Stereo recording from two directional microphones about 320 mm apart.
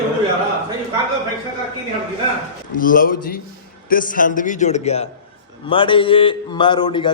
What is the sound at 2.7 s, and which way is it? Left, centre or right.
A man's voice, left.